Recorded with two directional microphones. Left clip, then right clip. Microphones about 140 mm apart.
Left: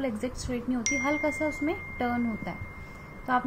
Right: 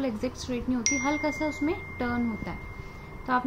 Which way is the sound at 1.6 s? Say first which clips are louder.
Even; 15° left (ahead or behind).